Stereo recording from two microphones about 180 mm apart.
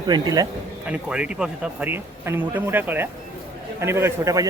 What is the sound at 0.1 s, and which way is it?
Speech, 20° right (ahead or behind).